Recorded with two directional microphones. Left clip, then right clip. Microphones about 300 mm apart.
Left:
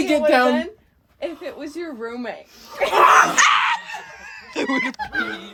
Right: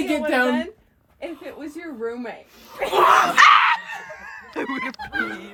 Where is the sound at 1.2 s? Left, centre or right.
Left.